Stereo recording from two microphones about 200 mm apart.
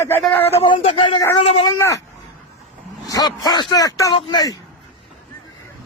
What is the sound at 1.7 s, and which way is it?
Speech, 15° left (ahead or behind).